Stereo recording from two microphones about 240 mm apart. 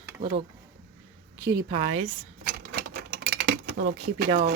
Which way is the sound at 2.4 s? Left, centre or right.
Right.